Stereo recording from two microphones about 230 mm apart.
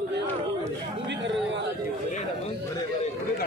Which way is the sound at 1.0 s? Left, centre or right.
Right.